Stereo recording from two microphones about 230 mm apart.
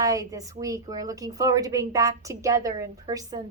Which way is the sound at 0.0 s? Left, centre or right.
Centre.